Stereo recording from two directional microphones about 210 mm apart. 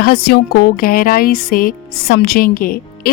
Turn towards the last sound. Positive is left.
turn(degrees=45)  # may be behind; listen again after turning